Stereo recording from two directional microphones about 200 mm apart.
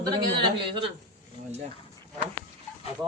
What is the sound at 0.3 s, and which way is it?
Speech, 25° right (ahead or behind).